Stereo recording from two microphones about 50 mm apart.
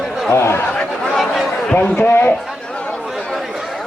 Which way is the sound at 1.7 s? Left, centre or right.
Left.